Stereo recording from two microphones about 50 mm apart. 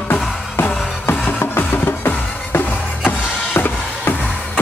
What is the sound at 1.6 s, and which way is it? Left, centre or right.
Music, left.